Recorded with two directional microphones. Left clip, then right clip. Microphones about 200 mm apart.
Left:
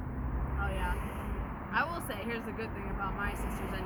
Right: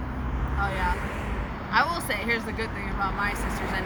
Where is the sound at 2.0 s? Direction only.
40° left (ahead or behind).